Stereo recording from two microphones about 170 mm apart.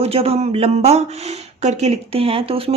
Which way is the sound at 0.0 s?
35° right (ahead or behind).